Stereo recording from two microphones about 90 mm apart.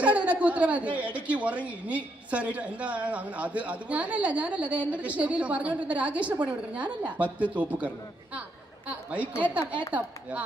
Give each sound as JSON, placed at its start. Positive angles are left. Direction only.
{"t": 0.0, "sound": "a woman's voice", "side_deg": -15}